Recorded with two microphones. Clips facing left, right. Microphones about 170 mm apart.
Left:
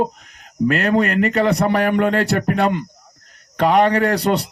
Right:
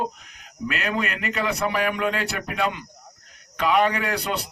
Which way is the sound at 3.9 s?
60° left (ahead or behind).